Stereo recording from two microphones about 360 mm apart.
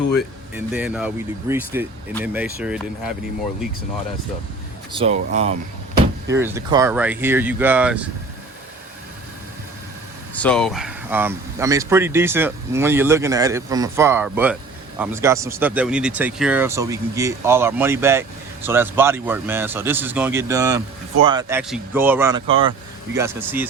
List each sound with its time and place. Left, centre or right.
0.2 s speech: centre
4.9 s speech: centre
6.2 s speech: centre
10.3 s speech: centre